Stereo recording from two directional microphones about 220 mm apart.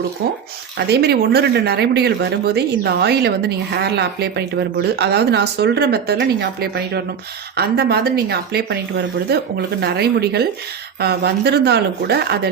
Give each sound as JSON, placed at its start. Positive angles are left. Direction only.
{"t": 0.8, "sound": "speech", "side_deg": -45}